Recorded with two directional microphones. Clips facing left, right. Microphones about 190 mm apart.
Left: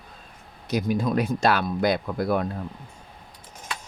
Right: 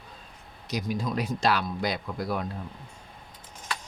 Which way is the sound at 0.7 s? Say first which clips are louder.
Left 6 dB; 55° left (ahead or behind).